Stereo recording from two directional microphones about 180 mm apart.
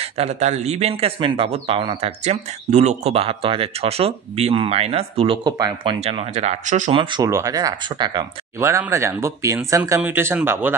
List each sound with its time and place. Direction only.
0.0 s speech: 35° right (ahead or behind)
6.9 s speech: 25° right (ahead or behind)
8.5 s speech: 15° right (ahead or behind)